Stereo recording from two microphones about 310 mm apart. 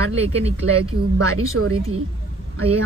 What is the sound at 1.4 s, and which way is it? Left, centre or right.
Speech, right.